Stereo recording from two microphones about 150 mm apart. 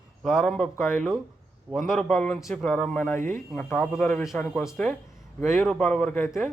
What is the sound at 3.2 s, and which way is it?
Speech, 60° right (ahead or behind).